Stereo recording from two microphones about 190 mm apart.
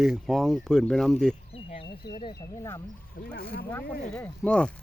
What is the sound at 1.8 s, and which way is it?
Speech, 25° left (ahead or behind).